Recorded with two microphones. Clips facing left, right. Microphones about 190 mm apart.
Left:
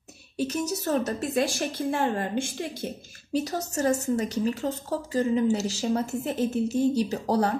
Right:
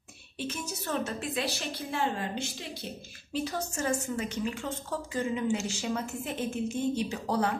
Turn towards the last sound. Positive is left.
turn(degrees=35)  # may be behind; listen again after turning